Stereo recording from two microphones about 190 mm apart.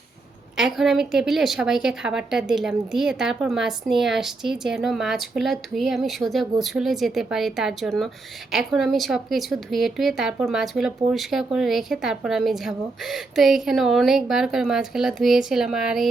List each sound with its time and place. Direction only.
0.5 s a woman's voice: centre (ahead or behind)